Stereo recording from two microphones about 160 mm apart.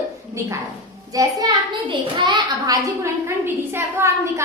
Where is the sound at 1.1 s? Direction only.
20° right (ahead or behind).